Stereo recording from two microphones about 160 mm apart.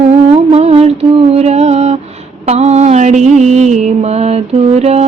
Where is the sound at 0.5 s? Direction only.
40° right (ahead or behind).